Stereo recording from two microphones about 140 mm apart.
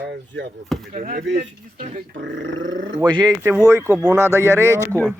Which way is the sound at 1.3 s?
55° right (ahead or behind).